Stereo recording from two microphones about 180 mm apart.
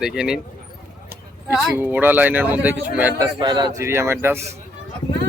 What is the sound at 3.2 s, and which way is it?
Speech, 25° right (ahead or behind).